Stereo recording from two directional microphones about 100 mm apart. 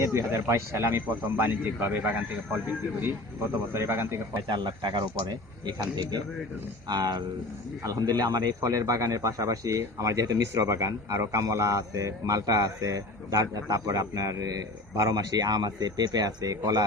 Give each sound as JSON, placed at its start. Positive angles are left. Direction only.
{"t": 0.0, "sound": "a man's voice", "side_deg": -30}
{"t": 4.4, "sound": "a man's voice", "side_deg": -50}